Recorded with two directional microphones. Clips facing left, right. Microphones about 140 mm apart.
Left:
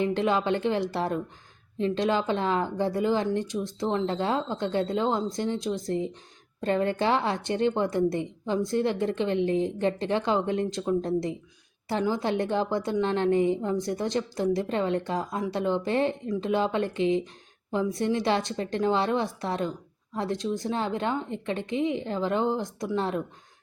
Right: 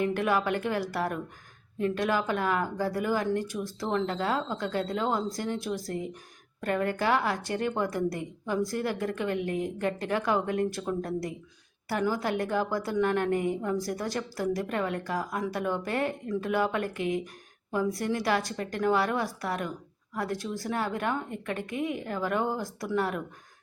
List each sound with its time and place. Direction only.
0.0 s a woman's voice: 25° left (ahead or behind)